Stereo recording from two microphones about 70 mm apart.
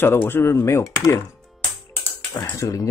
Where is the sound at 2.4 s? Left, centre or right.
Left.